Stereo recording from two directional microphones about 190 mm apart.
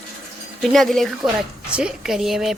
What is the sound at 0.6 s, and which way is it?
A woman's voice, centre (ahead or behind).